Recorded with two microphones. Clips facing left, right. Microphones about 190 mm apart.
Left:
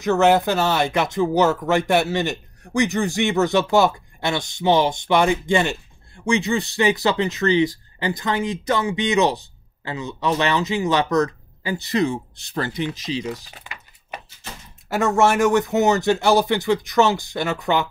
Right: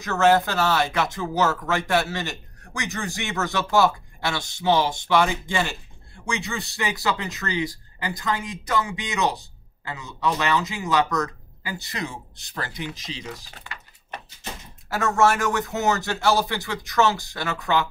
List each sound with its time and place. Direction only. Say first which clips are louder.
0.0 s speech: left 3 dB; 20° left (ahead or behind)
13.6 s typing: left 1 dB; 10° left (ahead or behind)
15.0 s speech: left 3 dB; 15° left (ahead or behind)